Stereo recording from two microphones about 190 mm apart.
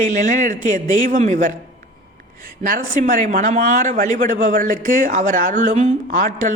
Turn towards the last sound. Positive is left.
turn(degrees=-45)  # may be behind; listen again after turning